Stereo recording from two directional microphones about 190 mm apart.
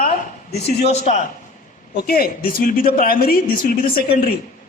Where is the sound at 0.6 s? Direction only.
35° left (ahead or behind).